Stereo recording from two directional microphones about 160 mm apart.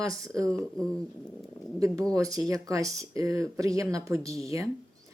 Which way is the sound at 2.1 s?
20° right (ahead or behind).